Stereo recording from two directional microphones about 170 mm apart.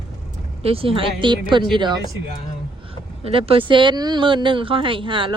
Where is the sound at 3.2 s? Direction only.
35° right (ahead or behind).